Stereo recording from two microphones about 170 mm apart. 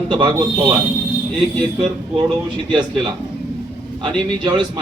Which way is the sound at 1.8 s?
25° right (ahead or behind).